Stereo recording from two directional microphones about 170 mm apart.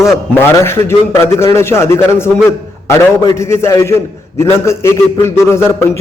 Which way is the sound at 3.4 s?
15° left (ahead or behind).